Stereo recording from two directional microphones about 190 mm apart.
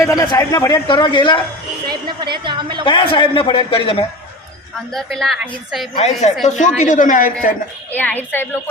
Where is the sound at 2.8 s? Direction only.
25° left (ahead or behind).